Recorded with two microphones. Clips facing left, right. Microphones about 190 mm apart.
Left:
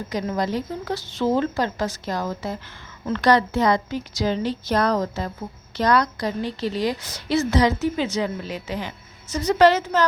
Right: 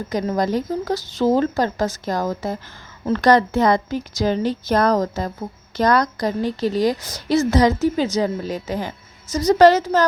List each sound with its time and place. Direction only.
0.1 s a woman's voice: 45° right (ahead or behind)